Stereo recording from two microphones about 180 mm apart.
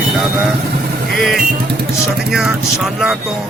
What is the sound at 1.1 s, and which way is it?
Speech, centre (ahead or behind).